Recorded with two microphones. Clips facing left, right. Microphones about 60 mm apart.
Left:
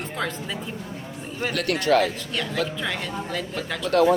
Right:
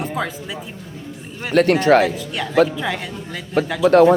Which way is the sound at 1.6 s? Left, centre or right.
Right.